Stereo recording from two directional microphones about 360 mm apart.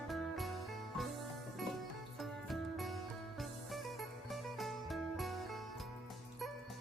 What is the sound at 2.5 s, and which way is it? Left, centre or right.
Music, centre.